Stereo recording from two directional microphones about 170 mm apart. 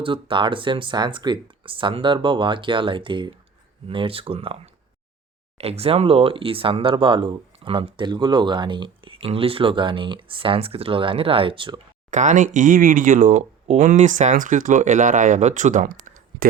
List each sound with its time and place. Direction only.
0.0 s speech: 30° right (ahead or behind)
12.1 s speech: 45° right (ahead or behind)